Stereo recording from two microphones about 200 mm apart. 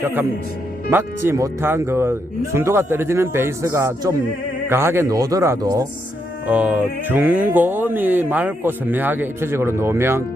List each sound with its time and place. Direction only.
0.9 s speech: 10° right (ahead or behind)